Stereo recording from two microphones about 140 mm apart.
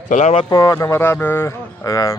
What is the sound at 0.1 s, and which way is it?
Speech, 55° left (ahead or behind).